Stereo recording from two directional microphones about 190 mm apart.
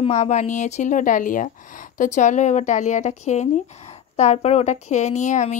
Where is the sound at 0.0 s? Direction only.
35° left (ahead or behind).